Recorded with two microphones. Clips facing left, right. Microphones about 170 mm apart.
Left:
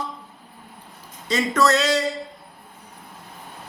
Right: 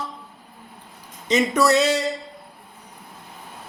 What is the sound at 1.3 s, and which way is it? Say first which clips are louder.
Speech: right 2 dB; 15° right (ahead or behind).